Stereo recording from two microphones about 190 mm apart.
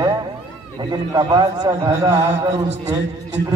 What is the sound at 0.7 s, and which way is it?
A man's voice, 20° right (ahead or behind).